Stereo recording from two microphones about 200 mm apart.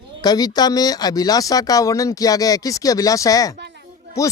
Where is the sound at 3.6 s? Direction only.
60° right (ahead or behind).